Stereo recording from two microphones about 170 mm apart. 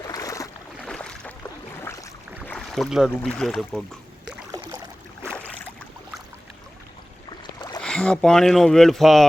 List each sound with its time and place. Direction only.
0.1 s boat: 20° left (ahead or behind)
0.9 s boat: 5° left (ahead or behind)
1.8 s boat: 15° left (ahead or behind)
2.5 s boat: centre (ahead or behind)
3.2 s speech: 5° left (ahead or behind)
4.5 s boat: 20° right (ahead or behind)
5.3 s boat: 10° left (ahead or behind)
7.3 s rowboat: 25° left (ahead or behind)
7.8 s speech: 5° left (ahead or behind)